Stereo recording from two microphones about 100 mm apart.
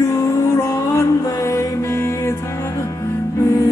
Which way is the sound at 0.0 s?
35° left (ahead or behind).